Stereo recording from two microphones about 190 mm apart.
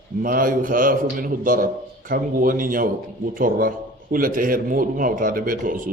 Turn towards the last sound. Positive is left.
turn(degrees=-45)  # may be behind; listen again after turning